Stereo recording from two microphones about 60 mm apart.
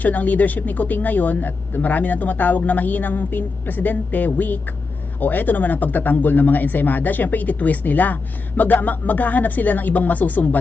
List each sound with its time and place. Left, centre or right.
0.0 s speech: left